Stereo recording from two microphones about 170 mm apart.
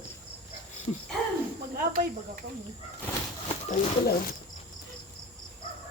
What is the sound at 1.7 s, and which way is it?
Speech, 55° right (ahead or behind).